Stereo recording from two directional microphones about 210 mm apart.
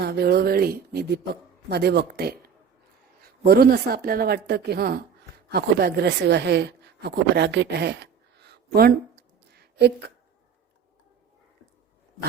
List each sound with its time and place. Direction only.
0.0 s a woman's voice: 50° right (ahead or behind)